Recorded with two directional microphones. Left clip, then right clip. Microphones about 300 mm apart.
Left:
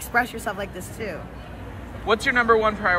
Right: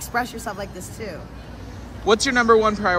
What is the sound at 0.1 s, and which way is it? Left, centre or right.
Speech, centre.